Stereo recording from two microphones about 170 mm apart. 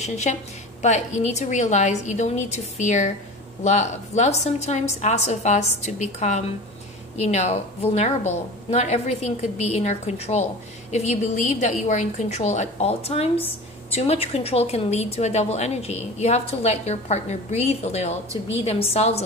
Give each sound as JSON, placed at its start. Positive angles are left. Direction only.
{"t": 0.0, "sound": "a woman's voice", "side_deg": 40}